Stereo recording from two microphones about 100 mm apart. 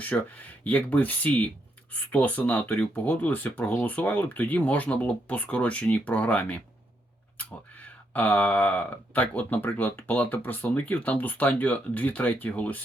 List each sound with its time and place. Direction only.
0.1 s speech: 10° left (ahead or behind)